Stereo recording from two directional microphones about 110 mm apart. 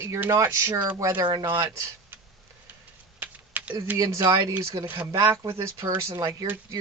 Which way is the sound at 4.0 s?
30° right (ahead or behind).